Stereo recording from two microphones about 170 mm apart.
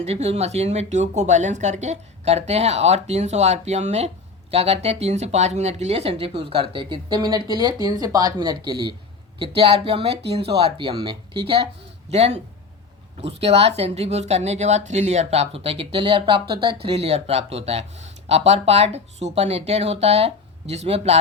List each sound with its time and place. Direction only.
0.0 s speech: 40° right (ahead or behind)
13.4 s speech: 35° right (ahead or behind)